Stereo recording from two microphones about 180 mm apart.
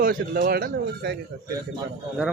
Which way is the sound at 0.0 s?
55° right (ahead or behind).